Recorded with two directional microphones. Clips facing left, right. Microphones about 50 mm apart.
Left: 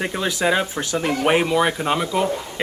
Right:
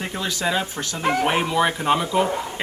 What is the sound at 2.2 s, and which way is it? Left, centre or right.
Speech, right.